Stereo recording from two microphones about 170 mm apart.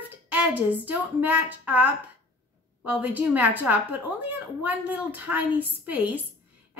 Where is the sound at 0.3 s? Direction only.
10° right (ahead or behind).